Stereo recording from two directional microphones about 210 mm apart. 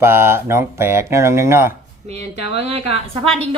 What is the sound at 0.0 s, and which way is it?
Speech, 10° right (ahead or behind).